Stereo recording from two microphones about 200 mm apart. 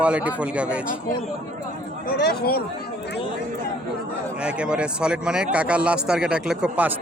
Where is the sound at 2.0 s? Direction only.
50° left (ahead or behind).